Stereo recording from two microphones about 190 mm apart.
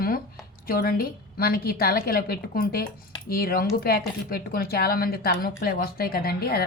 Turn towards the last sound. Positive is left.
turn(degrees=55)  # may be behind; listen again after turning